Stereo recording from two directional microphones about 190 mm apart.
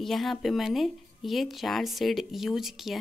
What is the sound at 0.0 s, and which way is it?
Speech, centre (ahead or behind).